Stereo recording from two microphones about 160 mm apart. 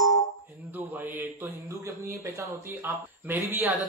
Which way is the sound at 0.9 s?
10° right (ahead or behind).